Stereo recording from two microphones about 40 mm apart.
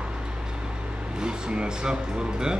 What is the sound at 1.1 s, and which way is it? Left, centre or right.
Speech, right.